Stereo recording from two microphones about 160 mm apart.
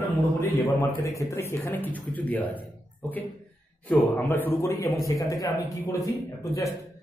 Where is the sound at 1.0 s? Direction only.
20° left (ahead or behind).